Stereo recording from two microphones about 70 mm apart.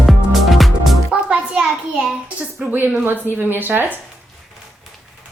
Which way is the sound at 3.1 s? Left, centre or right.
Right.